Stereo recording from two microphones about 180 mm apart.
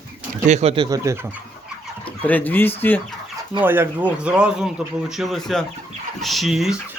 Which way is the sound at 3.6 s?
10° right (ahead or behind).